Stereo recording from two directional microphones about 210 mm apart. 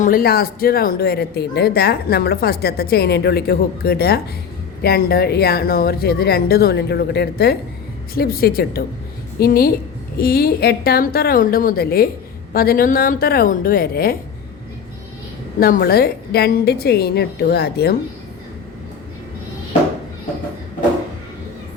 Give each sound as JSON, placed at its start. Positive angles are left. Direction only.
{"t": 0.0, "sound": "speech", "side_deg": 45}
{"t": 15.6, "sound": "speech", "side_deg": 45}